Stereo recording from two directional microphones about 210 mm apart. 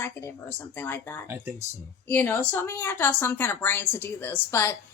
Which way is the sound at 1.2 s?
10° right (ahead or behind).